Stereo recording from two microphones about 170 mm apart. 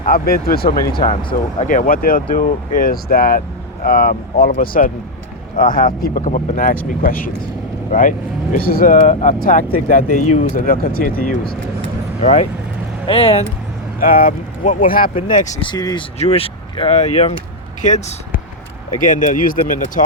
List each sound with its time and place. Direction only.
0.0 s speech: 60° left (ahead or behind)
1.5 s speech: 50° left (ahead or behind)
8.5 s speech: 60° left (ahead or behind)
12.2 s speech: 45° left (ahead or behind)
14.0 s speech: 55° left (ahead or behind)
15.3 s speech: 45° left (ahead or behind)
15.6 s speech: 25° left (ahead or behind)
16.1 s speech: 35° left (ahead or behind)